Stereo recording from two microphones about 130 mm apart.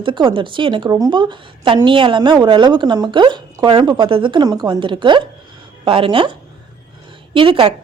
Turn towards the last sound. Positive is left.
turn(degrees=-45)  # may be behind; listen again after turning